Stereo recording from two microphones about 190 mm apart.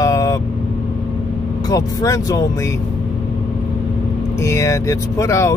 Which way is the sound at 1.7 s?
20° left (ahead or behind).